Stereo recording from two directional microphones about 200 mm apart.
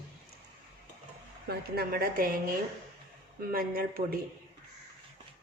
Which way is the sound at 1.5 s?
50° right (ahead or behind).